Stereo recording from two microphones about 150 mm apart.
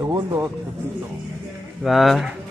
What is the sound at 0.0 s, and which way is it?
Speech, 20° right (ahead or behind).